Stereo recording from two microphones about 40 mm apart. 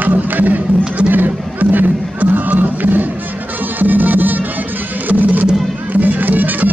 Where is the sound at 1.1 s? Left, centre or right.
Right.